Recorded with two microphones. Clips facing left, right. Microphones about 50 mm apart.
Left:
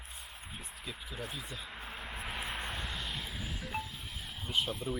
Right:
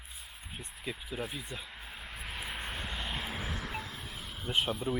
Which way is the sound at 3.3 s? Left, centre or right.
Right.